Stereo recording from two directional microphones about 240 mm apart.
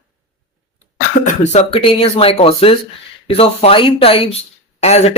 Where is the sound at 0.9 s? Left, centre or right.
Left.